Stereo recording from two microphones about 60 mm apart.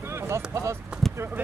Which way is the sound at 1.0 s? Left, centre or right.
Centre.